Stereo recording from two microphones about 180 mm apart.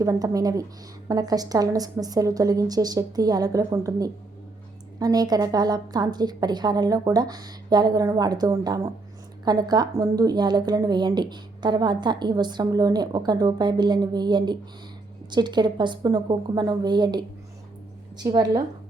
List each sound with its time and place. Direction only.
0.0 s a woman's voice: 20° right (ahead or behind)